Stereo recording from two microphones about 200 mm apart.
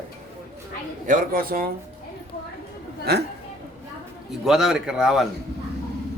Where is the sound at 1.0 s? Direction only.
45° right (ahead or behind).